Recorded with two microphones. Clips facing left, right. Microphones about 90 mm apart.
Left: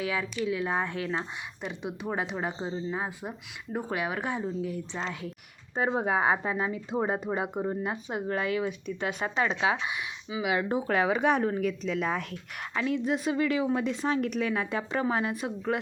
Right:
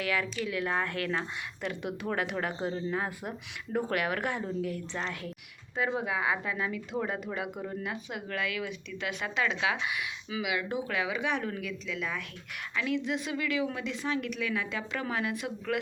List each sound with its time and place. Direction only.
0.0 s speech: 25° left (ahead or behind)
5.7 s speech: 35° left (ahead or behind)